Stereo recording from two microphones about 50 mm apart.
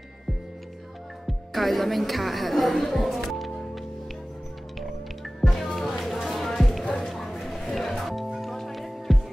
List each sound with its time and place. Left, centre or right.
1.2 s music: centre
6.8 s music: centre
7.1 s a sound: centre
7.7 s music: centre